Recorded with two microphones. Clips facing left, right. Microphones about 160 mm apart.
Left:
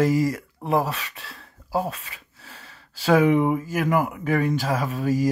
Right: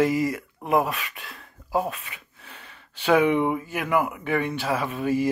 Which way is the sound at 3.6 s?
35° left (ahead or behind).